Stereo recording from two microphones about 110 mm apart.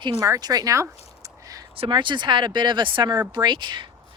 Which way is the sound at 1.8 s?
45° right (ahead or behind).